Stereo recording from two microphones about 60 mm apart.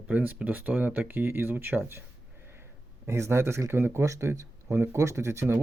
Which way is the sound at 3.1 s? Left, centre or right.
Right.